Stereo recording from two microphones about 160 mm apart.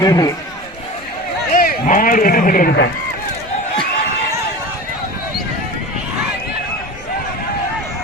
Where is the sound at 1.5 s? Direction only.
60° left (ahead or behind); by 2.9 s 75° left (ahead or behind).